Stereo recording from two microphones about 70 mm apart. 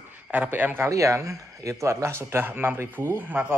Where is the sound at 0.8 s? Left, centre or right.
Right.